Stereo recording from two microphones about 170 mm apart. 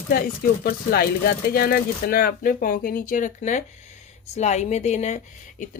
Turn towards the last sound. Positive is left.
turn(degrees=45)  # may be behind; listen again after turning